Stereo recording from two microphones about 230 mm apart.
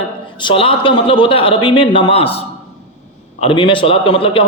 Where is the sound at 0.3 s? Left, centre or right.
Left.